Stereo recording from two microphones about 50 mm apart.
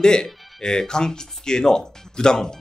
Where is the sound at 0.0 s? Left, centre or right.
Centre.